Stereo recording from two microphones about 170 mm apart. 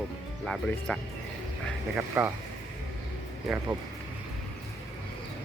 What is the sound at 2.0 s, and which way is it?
Speech, 15° right (ahead or behind).